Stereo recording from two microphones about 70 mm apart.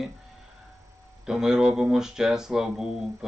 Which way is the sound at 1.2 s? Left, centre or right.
Centre.